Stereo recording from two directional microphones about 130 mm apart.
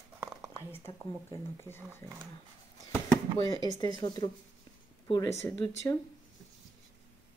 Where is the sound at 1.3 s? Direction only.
15° left (ahead or behind).